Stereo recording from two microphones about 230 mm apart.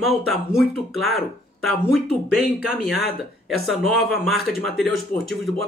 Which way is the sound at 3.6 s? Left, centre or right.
Centre.